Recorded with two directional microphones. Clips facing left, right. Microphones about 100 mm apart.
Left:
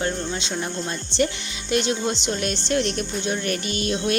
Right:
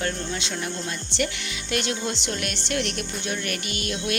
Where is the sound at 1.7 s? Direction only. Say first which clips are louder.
Left 5 dB; 25° left (ahead or behind).